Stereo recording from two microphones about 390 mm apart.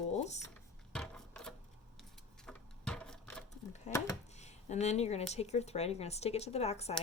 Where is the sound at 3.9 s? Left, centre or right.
Centre.